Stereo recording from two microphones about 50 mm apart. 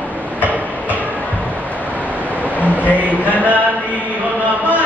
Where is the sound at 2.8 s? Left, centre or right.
Left.